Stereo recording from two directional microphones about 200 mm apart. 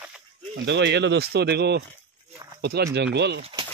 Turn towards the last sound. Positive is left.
turn(degrees=-25)  # may be behind; listen again after turning